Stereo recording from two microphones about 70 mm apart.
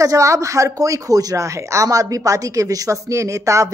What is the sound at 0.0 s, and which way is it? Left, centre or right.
Speech, right.